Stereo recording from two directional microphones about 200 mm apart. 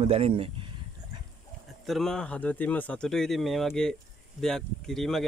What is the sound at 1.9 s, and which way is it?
Speech, centre (ahead or behind).